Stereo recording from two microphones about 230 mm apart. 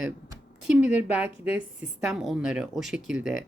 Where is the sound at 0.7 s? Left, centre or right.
Centre.